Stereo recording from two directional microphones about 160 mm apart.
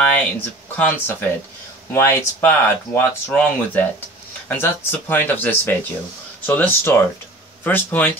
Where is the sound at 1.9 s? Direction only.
15° left (ahead or behind).